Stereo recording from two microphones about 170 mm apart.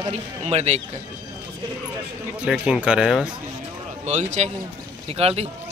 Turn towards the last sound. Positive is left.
turn(degrees=-35)  # may be behind; listen again after turning